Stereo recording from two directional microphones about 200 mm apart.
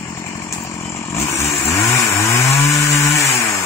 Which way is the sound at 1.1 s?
15° left (ahead or behind).